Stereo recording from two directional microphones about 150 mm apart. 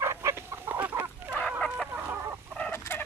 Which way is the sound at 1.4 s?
5° left (ahead or behind).